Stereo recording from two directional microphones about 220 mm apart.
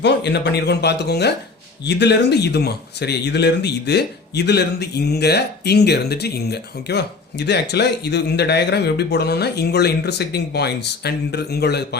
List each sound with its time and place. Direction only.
0.0 s speech: 50° left (ahead or behind)